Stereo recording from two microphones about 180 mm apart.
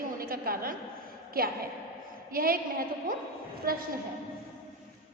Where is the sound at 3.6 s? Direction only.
55° right (ahead or behind).